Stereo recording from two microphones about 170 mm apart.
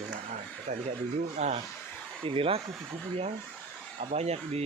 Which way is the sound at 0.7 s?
45° right (ahead or behind).